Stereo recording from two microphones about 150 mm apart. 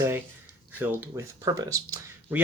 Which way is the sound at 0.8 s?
15° right (ahead or behind).